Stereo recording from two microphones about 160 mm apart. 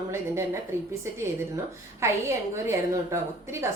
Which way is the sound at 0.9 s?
15° right (ahead or behind).